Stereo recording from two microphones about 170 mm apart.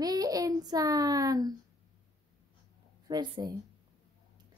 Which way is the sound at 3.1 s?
25° right (ahead or behind).